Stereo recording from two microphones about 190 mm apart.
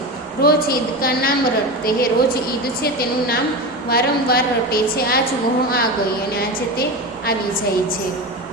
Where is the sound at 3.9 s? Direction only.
55° left (ahead or behind).